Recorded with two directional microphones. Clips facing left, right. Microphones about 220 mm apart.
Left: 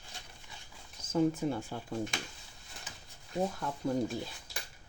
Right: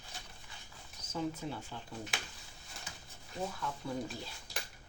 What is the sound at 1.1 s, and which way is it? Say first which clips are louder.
Speech: left 9 dB; 50° left (ahead or behind).